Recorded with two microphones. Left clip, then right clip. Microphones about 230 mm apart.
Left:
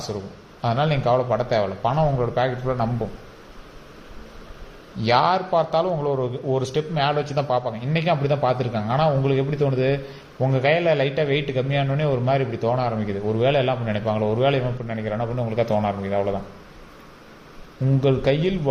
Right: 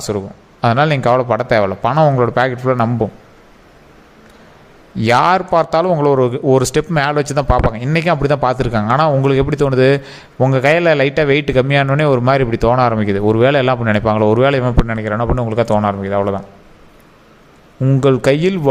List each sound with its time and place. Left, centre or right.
0.6 s a man's voice: right
4.9 s a man's voice: right
17.8 s a man's voice: right